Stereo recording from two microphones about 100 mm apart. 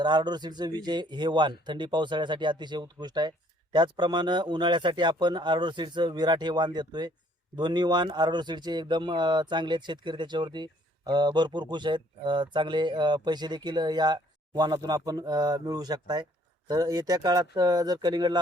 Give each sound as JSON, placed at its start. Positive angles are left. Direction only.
{"t": 0.0, "sound": "speech", "side_deg": -45}